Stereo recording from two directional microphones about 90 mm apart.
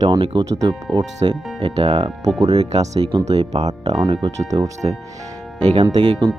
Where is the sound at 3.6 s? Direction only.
50° right (ahead or behind).